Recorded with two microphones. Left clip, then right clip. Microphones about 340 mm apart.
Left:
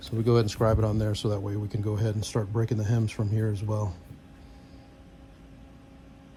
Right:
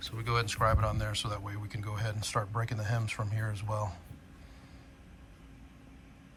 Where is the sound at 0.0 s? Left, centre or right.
Centre.